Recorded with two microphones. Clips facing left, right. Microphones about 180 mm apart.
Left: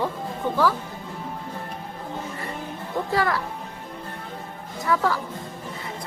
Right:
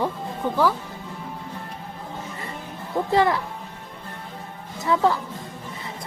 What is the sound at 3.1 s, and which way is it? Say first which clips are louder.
Speech: right 4 dB; 20° right (ahead or behind).